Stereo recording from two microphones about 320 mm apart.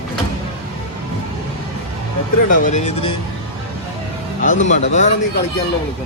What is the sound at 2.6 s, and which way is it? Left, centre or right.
Speech, left.